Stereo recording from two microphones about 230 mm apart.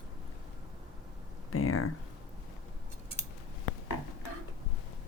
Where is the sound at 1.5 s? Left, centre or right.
Left.